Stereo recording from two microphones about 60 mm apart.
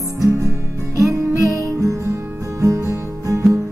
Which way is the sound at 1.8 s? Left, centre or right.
Right.